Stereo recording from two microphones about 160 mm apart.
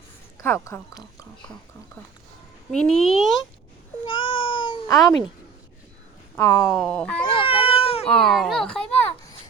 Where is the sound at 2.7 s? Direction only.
5° left (ahead or behind).